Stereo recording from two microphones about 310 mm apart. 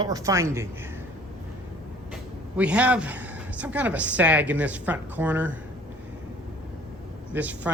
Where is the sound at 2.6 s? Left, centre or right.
Centre.